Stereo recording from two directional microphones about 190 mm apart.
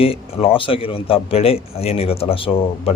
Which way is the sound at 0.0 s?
30° left (ahead or behind).